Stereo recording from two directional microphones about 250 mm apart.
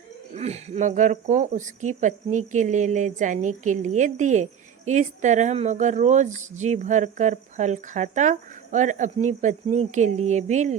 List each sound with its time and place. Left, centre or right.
0.3 s speech: right